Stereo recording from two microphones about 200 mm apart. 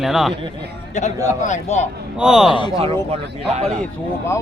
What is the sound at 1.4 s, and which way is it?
Speech, 35° left (ahead or behind).